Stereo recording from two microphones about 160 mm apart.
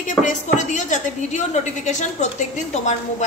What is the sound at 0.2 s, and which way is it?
Speech, 50° left (ahead or behind).